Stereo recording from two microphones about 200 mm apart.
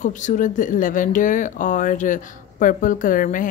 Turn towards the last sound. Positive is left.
turn(degrees=45)  # may be behind; listen again after turning